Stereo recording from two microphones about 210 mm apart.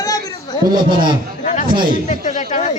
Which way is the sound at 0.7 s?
20° right (ahead or behind).